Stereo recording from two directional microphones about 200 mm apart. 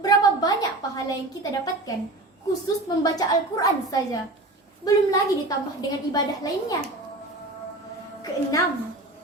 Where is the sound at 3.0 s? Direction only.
20° left (ahead or behind).